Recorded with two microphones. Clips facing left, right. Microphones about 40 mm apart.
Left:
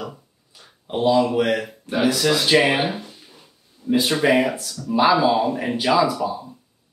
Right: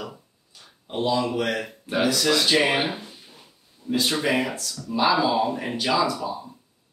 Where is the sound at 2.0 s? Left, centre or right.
Centre.